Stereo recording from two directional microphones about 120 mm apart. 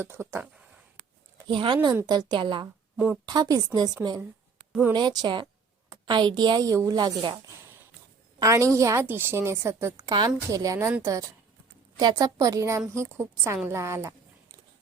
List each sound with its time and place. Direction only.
0.0 s a woman's voice: 20° right (ahead or behind)
1.0 s a sound: 55° right (ahead or behind)
1.5 s a woman's voice: 45° right (ahead or behind)
4.9 s a woman's voice: 35° right (ahead or behind)
8.4 s a woman's voice: 25° right (ahead or behind)